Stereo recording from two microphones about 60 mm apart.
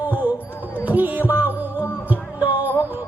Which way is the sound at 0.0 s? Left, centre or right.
Right.